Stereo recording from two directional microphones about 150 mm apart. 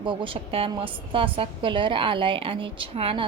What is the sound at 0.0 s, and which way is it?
A woman's voice, 35° right (ahead or behind).